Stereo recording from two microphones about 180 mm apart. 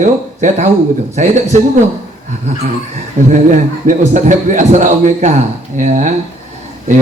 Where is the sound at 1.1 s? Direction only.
40° right (ahead or behind).